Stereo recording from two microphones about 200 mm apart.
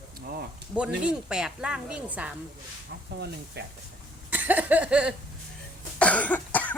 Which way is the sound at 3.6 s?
55° right (ahead or behind).